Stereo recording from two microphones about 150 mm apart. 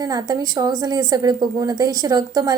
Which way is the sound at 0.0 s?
25° right (ahead or behind).